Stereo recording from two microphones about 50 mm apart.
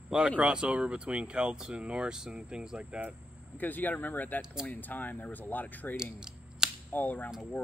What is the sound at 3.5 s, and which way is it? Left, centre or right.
Speech, left.